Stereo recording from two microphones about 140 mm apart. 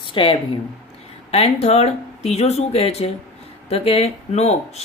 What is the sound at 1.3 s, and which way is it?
Speech, 45° left (ahead or behind).